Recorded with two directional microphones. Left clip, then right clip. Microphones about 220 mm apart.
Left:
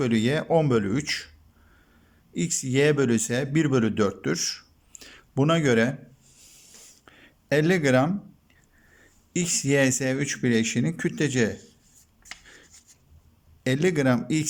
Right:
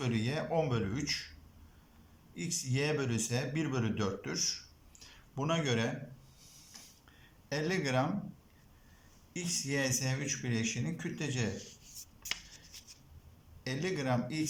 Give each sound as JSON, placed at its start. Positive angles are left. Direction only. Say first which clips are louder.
{"t": 0.0, "sound": "speech", "louder": "left 11 dB", "side_deg": 45}
{"t": 2.3, "sound": "speech", "louder": "left 12 dB", "side_deg": 45}
{"t": 7.2, "sound": "speech", "louder": "left 14 dB", "side_deg": 45}
{"t": 9.3, "sound": "speech", "louder": "left 12 dB", "side_deg": 45}
{"t": 13.7, "sound": "speech", "louder": "left 12 dB", "side_deg": 45}